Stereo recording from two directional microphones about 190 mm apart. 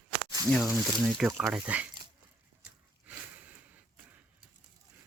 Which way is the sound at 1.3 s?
15° right (ahead or behind).